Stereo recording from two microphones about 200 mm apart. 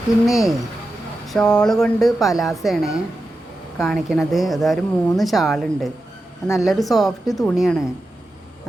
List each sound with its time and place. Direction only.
0.3 s a woman's voice: centre (ahead or behind)